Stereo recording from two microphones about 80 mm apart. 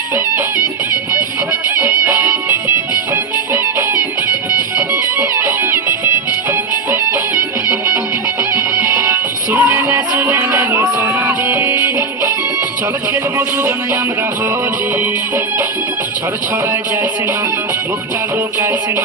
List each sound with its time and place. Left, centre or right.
1.8 s music: right
8.7 s music: right
9.5 s music: right